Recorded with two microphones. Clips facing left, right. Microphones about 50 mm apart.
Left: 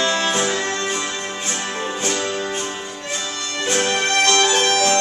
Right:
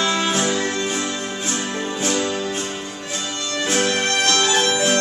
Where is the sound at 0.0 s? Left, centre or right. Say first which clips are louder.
Left 1 dB; centre.